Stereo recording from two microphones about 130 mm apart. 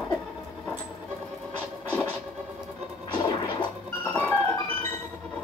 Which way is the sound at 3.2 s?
35° left (ahead or behind).